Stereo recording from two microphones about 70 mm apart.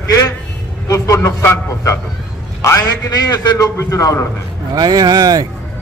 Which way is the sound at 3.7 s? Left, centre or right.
Left.